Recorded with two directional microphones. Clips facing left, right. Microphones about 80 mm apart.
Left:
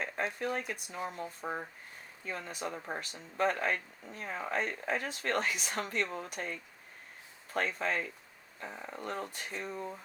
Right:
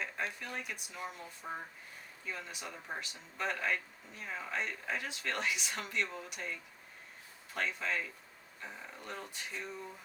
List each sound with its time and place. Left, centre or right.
0.5 s speech: left